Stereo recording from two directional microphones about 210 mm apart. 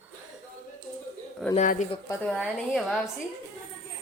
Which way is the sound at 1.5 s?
35° left (ahead or behind).